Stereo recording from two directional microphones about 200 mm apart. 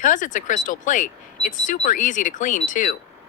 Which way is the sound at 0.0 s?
40° left (ahead or behind).